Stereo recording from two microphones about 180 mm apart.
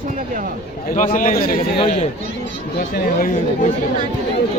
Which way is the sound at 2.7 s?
50° left (ahead or behind).